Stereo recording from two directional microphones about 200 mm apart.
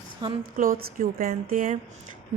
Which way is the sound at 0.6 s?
45° right (ahead or behind).